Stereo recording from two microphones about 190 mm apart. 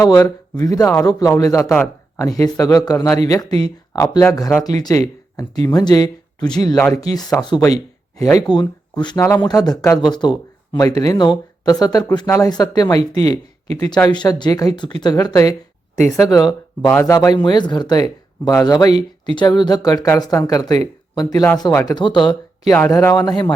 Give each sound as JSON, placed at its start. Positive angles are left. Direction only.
{"t": 0.0, "sound": "speech", "side_deg": 20}
{"t": 6.7, "sound": "speech", "side_deg": 10}
{"t": 7.0, "sound": "speech", "side_deg": 20}
{"t": 22.8, "sound": "speech", "side_deg": 10}